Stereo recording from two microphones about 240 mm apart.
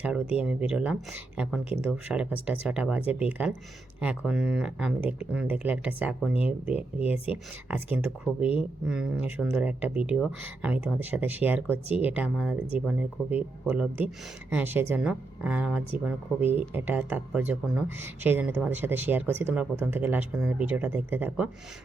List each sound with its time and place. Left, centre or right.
0.4 s a woman's voice: centre